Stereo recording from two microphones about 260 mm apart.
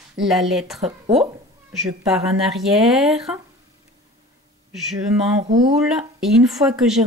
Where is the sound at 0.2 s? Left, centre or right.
Centre.